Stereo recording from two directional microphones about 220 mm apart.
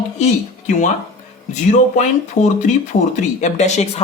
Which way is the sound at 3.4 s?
30° left (ahead or behind).